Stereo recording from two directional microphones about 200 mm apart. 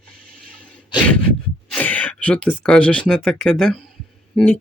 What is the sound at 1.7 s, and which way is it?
Speech, 5° left (ahead or behind).